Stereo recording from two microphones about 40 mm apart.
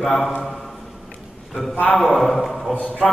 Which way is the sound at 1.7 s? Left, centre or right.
Left.